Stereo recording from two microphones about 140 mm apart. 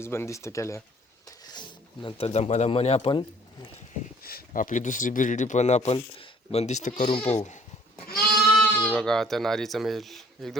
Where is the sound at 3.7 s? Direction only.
60° left (ahead or behind).